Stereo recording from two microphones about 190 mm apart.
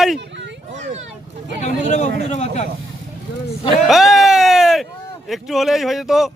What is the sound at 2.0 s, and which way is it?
Speech, 60° right (ahead or behind).